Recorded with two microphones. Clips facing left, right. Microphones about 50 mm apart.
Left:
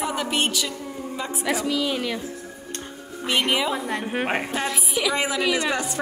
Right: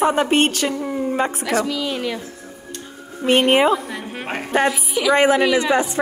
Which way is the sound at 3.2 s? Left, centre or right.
Right.